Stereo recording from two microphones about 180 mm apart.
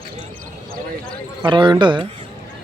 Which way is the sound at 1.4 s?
25° right (ahead or behind).